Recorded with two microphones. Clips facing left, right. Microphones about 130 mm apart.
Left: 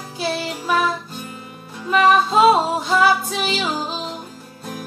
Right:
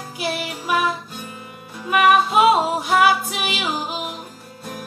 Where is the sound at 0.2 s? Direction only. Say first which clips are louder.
Left 2 dB; 15° right (ahead or behind).